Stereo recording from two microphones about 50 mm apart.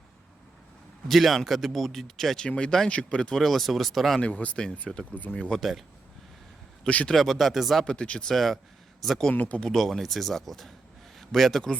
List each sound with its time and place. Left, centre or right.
1.0 s speech: centre
2.4 s speech: centre
3.3 s speech: centre
4.2 s speech: left
6.8 s speech: left
7.1 s speech: centre
7.9 s speech: left
8.3 s speech: centre
9.3 s speech: left
9.6 s a man's voice: centre